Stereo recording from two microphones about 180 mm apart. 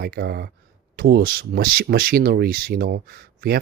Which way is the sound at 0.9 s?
55° right (ahead or behind).